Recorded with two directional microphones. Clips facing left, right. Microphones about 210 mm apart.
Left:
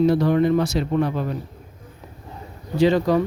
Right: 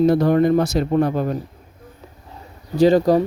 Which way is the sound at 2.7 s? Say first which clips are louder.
Right 3 dB; 40° right (ahead or behind).